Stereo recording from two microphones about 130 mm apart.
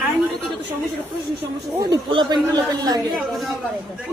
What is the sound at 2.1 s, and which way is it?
Speech, 35° right (ahead or behind).